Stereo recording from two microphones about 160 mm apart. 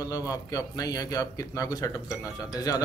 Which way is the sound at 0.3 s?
20° left (ahead or behind).